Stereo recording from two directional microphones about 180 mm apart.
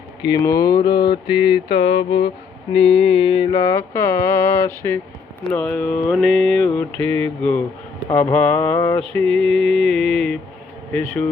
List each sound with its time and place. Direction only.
0.2 s speech: 20° left (ahead or behind)
1.6 s mantra: 30° left (ahead or behind); by 11.3 s 10° left (ahead or behind)